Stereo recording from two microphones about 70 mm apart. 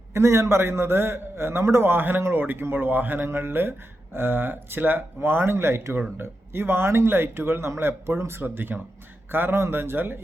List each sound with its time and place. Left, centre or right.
0.1 s a man's voice: right